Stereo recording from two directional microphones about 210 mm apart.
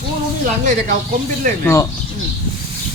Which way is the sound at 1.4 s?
40° right (ahead or behind).